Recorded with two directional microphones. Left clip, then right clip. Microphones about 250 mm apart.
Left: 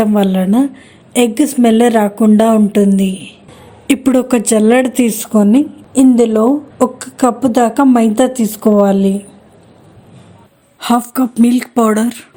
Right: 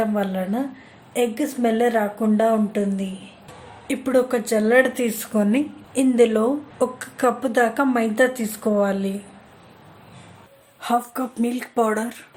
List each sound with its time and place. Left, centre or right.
0.0 s speech: left
10.8 s speech: left